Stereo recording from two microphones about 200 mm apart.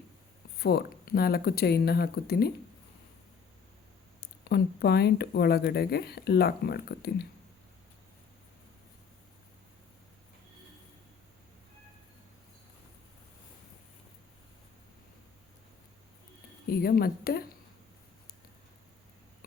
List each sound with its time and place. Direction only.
0.6 s speech: 50° left (ahead or behind)
4.2 s speech: 55° left (ahead or behind)
16.6 s speech: 50° left (ahead or behind)